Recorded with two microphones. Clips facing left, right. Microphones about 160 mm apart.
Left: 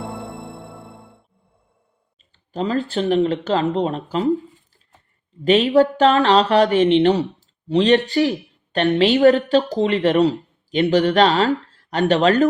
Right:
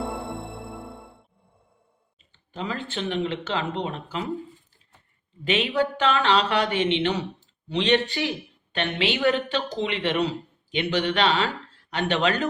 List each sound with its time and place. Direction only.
2.5 s speech: 40° left (ahead or behind)
5.5 s speech: 40° left (ahead or behind)